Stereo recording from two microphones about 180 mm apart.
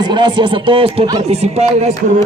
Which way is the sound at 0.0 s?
25° right (ahead or behind).